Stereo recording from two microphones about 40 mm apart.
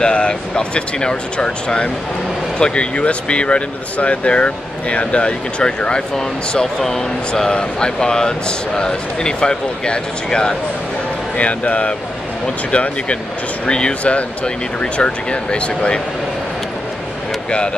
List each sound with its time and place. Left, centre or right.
0.0 s speech: left
11.3 s speech: left